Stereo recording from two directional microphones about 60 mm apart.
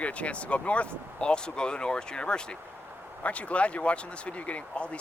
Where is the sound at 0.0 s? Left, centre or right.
Left.